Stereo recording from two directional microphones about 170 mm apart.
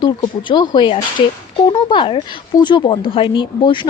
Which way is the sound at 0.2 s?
25° left (ahead or behind).